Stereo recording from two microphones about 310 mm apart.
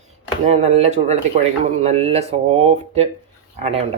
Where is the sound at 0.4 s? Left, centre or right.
Right.